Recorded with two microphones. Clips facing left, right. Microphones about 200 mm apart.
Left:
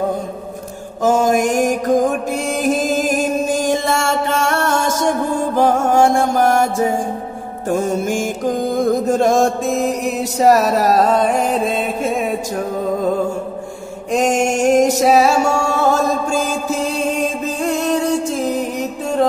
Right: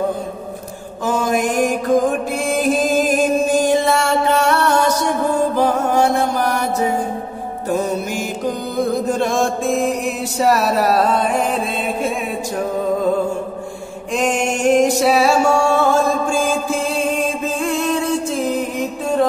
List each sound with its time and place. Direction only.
1.0 s mantra: 45° left (ahead or behind)
5.6 s music: 45° left (ahead or behind)
14.1 s music: 40° left (ahead or behind)
17.6 s music: 40° left (ahead or behind)